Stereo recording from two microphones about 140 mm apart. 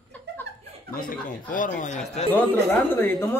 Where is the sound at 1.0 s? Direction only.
75° left (ahead or behind); by 2.2 s 55° left (ahead or behind).